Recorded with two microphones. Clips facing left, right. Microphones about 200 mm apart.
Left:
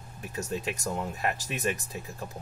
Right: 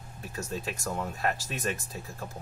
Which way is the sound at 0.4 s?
20° left (ahead or behind).